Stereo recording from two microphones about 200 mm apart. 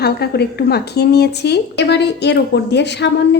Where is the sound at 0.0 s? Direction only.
55° left (ahead or behind).